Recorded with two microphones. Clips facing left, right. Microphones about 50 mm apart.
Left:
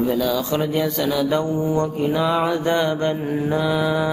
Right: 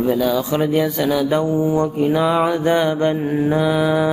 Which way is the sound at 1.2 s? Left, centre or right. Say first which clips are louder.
Right 3 dB; centre.